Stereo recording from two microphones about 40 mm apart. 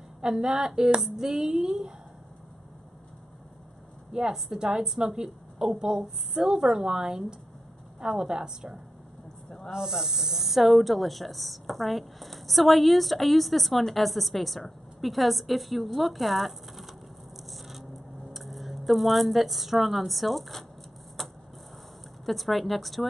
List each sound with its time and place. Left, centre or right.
0.2 s a woman's voice: centre
4.1 s a woman's voice: centre
17.5 s a sound: centre
22.2 s speech: centre